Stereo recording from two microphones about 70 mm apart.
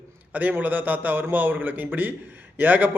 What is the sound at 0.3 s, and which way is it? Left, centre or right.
A man's voice, right.